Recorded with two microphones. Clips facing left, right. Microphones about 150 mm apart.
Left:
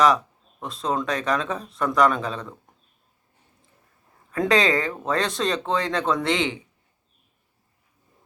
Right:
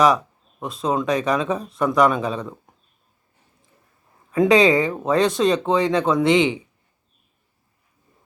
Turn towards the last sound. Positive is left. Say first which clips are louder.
# right 6 dB
turn(degrees=-15)  # may be behind; listen again after turning